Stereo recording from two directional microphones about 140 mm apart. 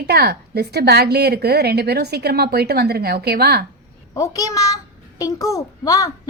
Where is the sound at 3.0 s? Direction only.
90° right.